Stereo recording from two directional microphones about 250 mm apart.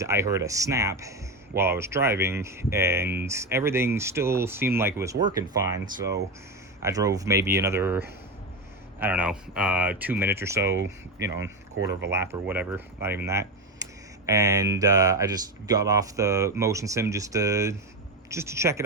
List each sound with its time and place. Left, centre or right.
0.0 s speech: centre
6.8 s speech: centre
11.9 s speech: right
12.1 s speech: centre